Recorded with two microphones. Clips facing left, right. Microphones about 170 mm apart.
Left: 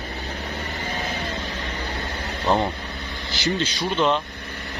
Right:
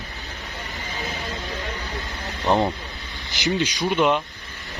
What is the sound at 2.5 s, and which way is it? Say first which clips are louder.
Speech: right 1 dB; 20° right (ahead or behind).